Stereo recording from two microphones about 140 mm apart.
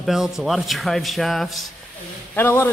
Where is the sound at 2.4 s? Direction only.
15° left (ahead or behind).